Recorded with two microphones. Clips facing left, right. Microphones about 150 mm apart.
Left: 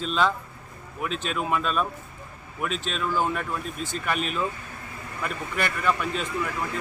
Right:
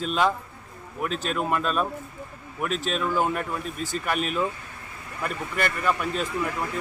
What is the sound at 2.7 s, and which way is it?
Speech, 45° right (ahead or behind).